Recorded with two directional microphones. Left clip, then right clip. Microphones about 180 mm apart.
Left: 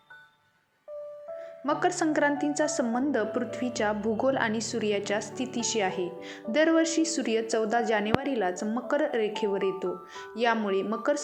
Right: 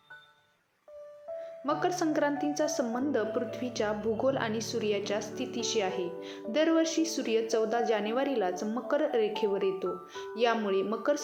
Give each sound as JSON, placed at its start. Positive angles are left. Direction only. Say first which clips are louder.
{"t": 1.6, "sound": "a woman's voice", "louder": "left 3 dB", "side_deg": 20}